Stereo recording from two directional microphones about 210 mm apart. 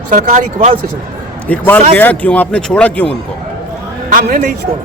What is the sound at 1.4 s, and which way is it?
Speech, 10° left (ahead or behind).